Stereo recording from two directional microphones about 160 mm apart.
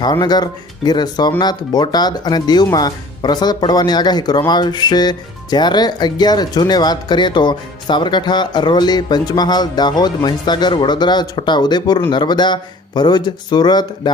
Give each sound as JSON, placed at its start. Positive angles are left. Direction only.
{"t": 0.0, "sound": "speech", "side_deg": 25}